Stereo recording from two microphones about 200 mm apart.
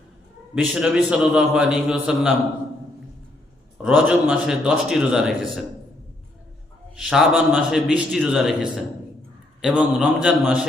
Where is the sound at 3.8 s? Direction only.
5° right (ahead or behind).